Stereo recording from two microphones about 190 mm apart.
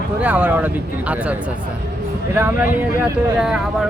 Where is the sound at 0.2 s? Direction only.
10° right (ahead or behind).